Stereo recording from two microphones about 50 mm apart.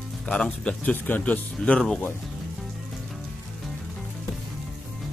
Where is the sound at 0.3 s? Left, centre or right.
Centre.